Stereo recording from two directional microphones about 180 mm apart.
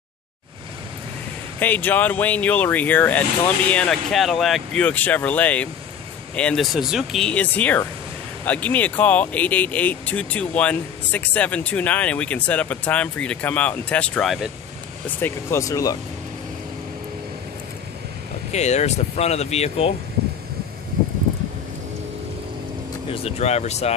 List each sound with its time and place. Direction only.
1.6 s speech: 10° left (ahead or behind)
15.0 s speech: 10° left (ahead or behind)
18.5 s speech: 40° left (ahead or behind)
20.2 s a sound: 60° right (ahead or behind)
23.1 s speech: 35° left (ahead or behind)